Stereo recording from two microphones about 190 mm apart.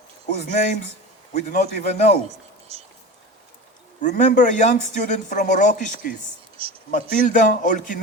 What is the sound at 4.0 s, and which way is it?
A man's voice, 40° left (ahead or behind).